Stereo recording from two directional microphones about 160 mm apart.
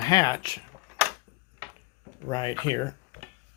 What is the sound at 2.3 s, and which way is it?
Speech, 30° left (ahead or behind).